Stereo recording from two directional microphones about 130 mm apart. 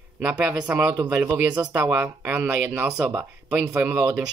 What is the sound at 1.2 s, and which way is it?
Speech, 20° right (ahead or behind).